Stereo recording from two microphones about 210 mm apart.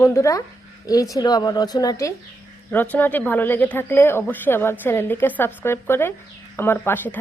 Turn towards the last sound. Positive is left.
turn(degrees=10)  # may be behind; listen again after turning